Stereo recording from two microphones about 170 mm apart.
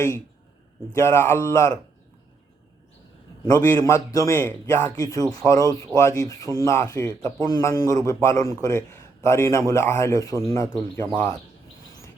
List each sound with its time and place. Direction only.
0.9 s a man's voice: 15° left (ahead or behind)
3.4 s a man's voice: 20° left (ahead or behind)